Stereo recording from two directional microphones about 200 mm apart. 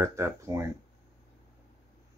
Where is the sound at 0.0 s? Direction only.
15° right (ahead or behind).